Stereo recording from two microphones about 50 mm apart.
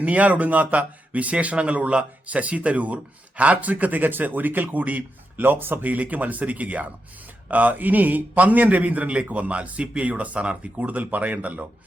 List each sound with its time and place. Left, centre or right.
0.0 s speech: right
5.8 s speech: right